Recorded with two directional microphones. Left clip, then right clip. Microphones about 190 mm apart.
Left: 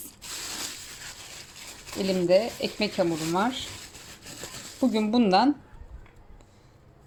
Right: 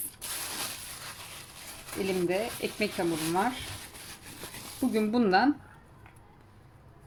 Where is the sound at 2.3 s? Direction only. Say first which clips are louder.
Left 8 dB; 25° left (ahead or behind).